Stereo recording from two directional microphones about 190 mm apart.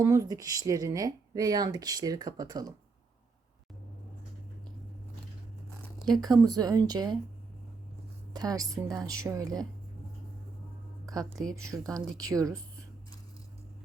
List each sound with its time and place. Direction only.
0.0 s speech: 15° right (ahead or behind)
6.1 s speech: 20° right (ahead or behind)
8.3 s speech: 20° right (ahead or behind)
11.0 s speech: 20° right (ahead or behind)